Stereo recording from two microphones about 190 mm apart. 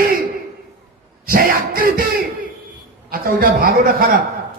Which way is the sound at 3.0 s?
50° right (ahead or behind).